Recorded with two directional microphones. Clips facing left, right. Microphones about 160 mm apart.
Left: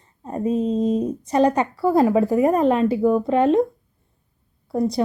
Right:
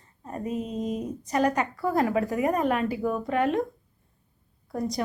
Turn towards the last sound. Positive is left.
turn(degrees=25)  # may be behind; listen again after turning